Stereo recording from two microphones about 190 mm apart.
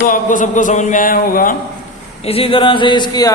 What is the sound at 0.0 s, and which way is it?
Music, 45° left (ahead or behind).